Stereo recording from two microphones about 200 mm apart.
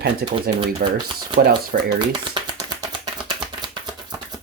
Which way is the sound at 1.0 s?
25° right (ahead or behind).